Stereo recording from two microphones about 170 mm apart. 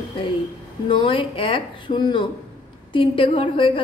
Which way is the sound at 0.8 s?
30° left (ahead or behind).